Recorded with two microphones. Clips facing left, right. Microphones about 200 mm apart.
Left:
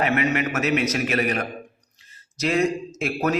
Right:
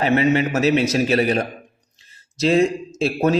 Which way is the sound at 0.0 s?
30° right (ahead or behind).